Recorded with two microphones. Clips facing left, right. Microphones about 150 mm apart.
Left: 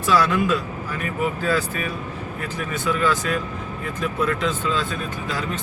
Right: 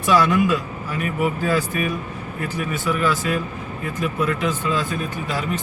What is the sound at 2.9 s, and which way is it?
Speech, 10° right (ahead or behind).